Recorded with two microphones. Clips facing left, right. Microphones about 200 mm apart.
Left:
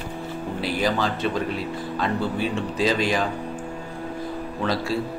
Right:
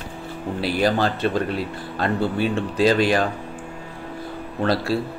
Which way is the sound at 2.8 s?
65° right (ahead or behind).